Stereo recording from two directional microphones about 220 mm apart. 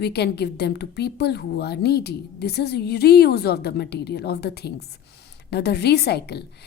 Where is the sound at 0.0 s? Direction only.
50° left (ahead or behind).